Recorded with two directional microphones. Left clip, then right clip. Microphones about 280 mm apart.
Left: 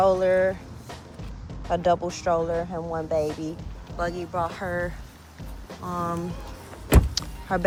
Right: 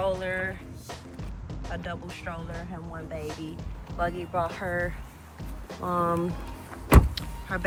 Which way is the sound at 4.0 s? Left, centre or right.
Centre.